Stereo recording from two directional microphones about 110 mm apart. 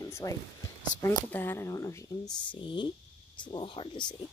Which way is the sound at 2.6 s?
45° left (ahead or behind).